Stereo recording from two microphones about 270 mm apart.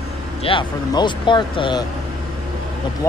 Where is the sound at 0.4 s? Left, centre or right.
Centre.